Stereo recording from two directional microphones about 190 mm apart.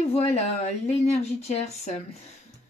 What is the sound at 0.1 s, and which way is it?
Speech, 35° left (ahead or behind).